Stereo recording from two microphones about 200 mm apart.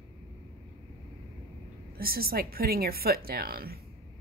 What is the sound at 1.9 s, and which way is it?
Speech, 50° right (ahead or behind).